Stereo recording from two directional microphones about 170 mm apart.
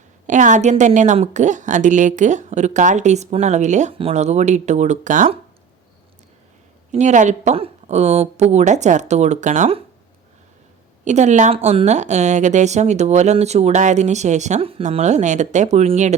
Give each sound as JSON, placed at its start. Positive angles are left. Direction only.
{"t": 0.3, "sound": "a woman's voice", "side_deg": -45}
{"t": 6.9, "sound": "a woman's voice", "side_deg": -45}
{"t": 11.0, "sound": "a woman's voice", "side_deg": -45}